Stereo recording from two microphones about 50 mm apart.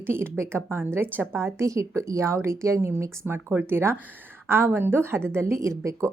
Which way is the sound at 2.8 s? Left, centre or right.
Right.